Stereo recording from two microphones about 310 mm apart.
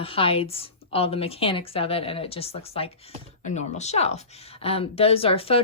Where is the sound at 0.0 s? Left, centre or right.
Centre.